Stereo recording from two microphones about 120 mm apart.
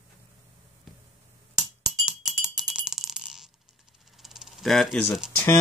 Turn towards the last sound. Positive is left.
turn(degrees=20)  # may be behind; listen again after turning